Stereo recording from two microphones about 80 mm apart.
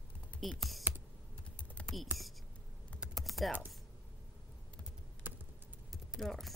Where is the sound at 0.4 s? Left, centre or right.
Centre.